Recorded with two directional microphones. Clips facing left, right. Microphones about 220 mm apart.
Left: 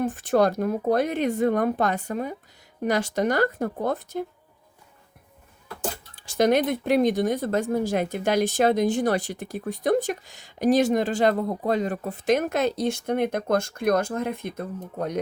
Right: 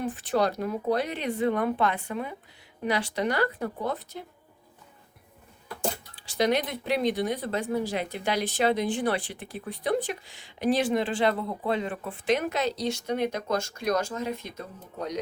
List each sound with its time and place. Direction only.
0.0 s speech: 45° left (ahead or behind)
6.1 s speech: 45° left (ahead or behind)